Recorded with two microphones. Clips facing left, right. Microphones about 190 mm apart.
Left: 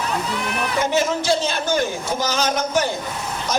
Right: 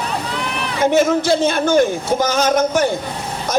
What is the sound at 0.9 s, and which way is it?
A man's voice, 55° right (ahead or behind).